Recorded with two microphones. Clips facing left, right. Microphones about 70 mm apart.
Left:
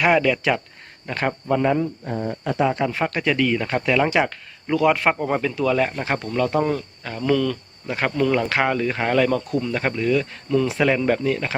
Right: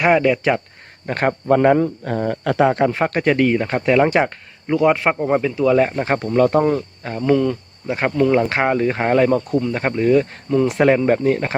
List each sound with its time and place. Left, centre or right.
0.0 s speech: right
1.5 s speech: right
2.0 s speech: right
3.0 s speech: right; by 5.6 s centre
5.6 s speech: right